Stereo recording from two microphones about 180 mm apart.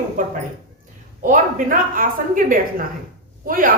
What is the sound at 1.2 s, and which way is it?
A woman's voice, 50° right (ahead or behind).